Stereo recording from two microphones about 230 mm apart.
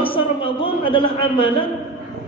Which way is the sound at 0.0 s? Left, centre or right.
Left.